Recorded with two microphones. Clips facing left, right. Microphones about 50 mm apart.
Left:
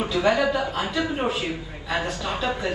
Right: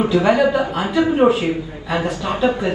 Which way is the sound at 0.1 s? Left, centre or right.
Right.